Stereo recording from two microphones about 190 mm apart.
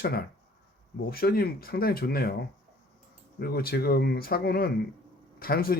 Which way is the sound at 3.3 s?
55° left (ahead or behind).